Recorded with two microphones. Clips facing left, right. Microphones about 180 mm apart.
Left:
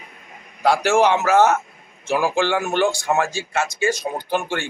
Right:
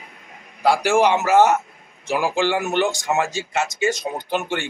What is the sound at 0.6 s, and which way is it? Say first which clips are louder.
A man's voice: even; 10° right (ahead or behind).